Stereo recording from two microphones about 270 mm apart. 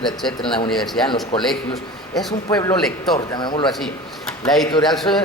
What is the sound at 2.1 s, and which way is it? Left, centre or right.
Speech, centre.